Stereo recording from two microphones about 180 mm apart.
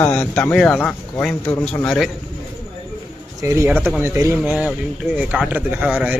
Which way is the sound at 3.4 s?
15° right (ahead or behind).